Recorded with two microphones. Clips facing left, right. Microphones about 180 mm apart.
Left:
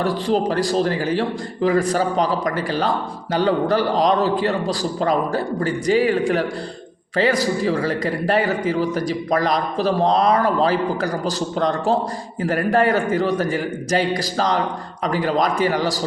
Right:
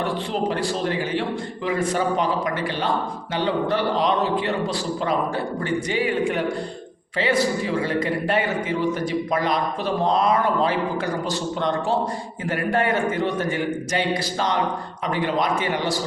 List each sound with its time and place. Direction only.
0.0 s a man's voice: 40° left (ahead or behind)